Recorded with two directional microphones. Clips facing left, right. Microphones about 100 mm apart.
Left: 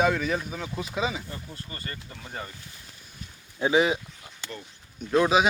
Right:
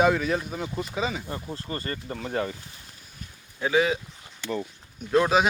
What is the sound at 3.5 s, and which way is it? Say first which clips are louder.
Speech: left 1 dB; 20° left (ahead or behind).